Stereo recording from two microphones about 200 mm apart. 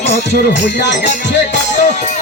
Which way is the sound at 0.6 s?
60° left (ahead or behind).